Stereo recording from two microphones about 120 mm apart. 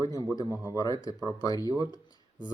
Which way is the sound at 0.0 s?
30° left (ahead or behind).